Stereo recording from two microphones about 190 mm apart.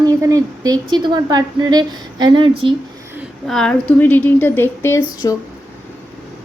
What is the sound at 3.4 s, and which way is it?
Speech, 5° left (ahead or behind).